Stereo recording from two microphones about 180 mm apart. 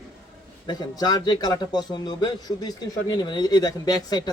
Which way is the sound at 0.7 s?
20° left (ahead or behind).